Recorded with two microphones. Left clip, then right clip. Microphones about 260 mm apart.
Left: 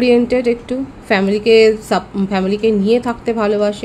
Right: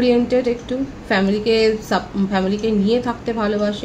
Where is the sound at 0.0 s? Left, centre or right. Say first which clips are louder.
Left 4 dB; left.